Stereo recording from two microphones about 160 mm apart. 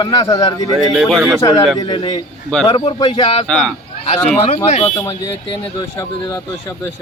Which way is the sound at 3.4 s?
5° left (ahead or behind).